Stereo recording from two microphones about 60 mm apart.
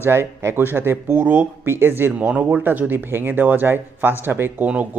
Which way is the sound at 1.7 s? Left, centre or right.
Right.